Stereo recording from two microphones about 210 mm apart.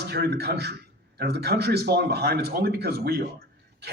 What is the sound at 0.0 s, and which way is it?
Speech, 50° right (ahead or behind).